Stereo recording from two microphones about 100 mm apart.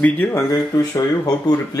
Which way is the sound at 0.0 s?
20° left (ahead or behind).